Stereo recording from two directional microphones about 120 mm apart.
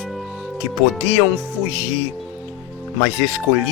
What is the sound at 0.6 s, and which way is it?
Speech, 5° right (ahead or behind).